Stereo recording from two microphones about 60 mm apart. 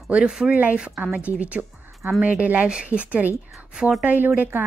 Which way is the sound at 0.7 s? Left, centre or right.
Right.